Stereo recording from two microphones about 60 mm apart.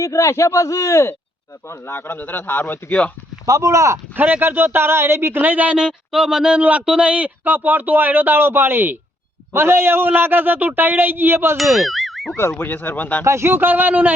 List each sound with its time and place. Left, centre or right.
0.0 s a man's voice: left
1.9 s speech: left
3.4 s speech: right
4.2 s speech: right
5.7 s speech: centre
6.6 s speech: right
11.5 s speech: centre
12.5 s speech: left
13.2 s speech: right